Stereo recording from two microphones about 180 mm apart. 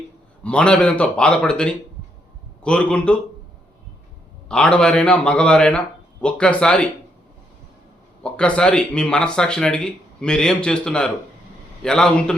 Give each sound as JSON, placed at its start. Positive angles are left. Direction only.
{"t": 0.4, "sound": "speech", "side_deg": 5}
{"t": 4.4, "sound": "speech", "side_deg": 5}
{"t": 8.2, "sound": "speech", "side_deg": 5}